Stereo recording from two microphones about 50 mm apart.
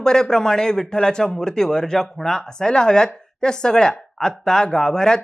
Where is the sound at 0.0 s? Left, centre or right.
Centre.